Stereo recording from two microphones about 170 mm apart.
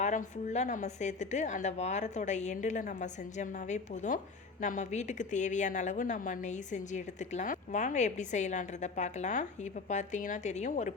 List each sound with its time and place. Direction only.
0.0 s a woman's voice: 45° left (ahead or behind)